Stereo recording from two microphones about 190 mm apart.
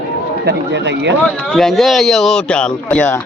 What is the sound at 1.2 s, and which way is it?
Speech, centre (ahead or behind).